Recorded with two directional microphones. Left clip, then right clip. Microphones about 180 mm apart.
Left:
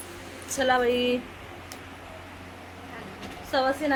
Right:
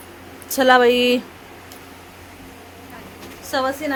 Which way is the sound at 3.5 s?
50° right (ahead or behind).